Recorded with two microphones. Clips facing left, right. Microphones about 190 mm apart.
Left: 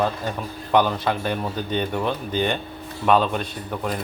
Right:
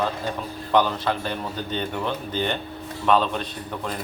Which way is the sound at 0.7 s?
15° left (ahead or behind).